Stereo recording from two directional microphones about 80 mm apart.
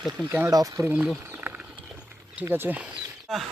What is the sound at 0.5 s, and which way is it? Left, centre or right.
Speech, right.